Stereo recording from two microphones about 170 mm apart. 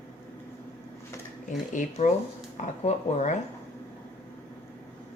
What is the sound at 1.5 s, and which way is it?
A woman's voice, 50° left (ahead or behind).